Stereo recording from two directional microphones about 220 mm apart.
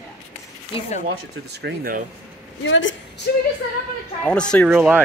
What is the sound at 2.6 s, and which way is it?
Speech, 60° left (ahead or behind).